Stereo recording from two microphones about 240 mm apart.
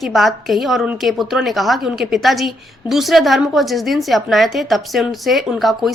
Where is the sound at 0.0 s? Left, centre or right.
Centre.